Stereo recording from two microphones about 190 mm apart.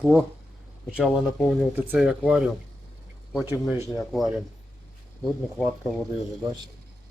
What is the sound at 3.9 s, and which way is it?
Speech, centre (ahead or behind).